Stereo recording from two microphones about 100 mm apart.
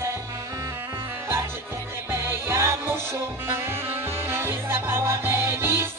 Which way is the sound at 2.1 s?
25° right (ahead or behind).